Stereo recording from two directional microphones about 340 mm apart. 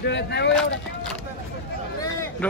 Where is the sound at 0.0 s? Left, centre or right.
Left.